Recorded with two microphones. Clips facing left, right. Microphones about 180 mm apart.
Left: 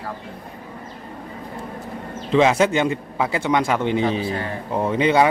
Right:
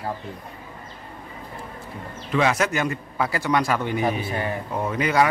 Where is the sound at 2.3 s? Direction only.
25° left (ahead or behind).